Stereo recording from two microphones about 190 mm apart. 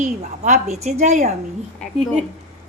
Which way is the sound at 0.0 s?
35° right (ahead or behind).